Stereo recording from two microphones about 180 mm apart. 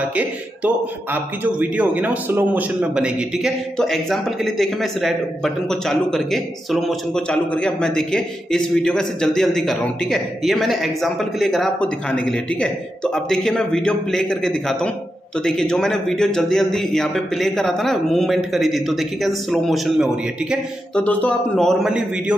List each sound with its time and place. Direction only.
0.0 s a man's voice: 10° right (ahead or behind)